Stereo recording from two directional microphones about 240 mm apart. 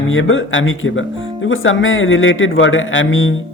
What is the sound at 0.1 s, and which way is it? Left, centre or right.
Speech, left.